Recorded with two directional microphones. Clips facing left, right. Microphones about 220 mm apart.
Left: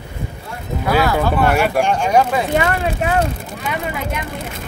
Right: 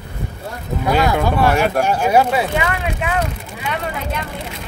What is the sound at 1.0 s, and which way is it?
Speech, 15° right (ahead or behind).